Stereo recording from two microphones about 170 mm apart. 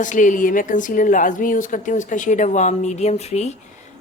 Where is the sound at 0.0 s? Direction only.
50° left (ahead or behind).